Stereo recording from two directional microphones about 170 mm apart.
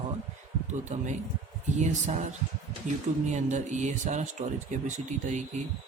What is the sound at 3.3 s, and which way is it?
Speech, 45° right (ahead or behind).